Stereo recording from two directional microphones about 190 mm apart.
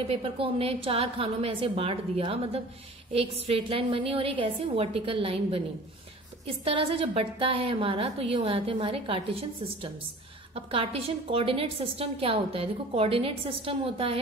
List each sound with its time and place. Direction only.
0.1 s a woman's voice: 30° right (ahead or behind)